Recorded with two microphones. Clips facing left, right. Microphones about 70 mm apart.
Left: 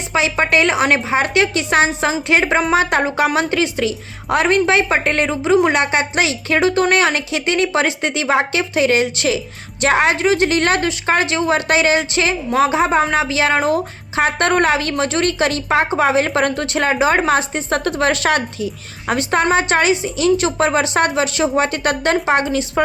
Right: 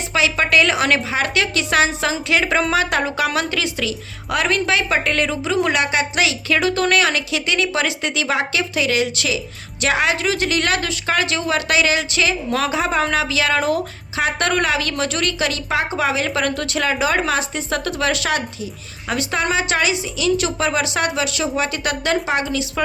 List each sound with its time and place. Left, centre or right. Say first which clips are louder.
0.1 s a woman's voice: left 2 dB; left